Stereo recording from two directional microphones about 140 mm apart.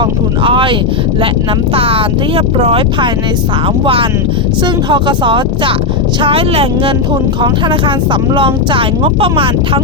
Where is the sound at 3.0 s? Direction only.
35° right (ahead or behind).